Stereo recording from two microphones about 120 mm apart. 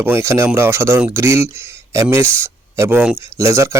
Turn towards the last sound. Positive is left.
turn(degrees=-25)  # may be behind; listen again after turning